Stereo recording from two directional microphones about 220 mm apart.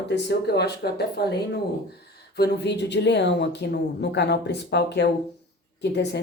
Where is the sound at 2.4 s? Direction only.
50° left (ahead or behind).